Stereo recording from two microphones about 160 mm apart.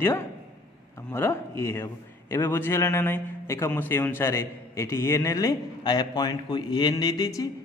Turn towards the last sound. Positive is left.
turn(degrees=25)  # may be behind; listen again after turning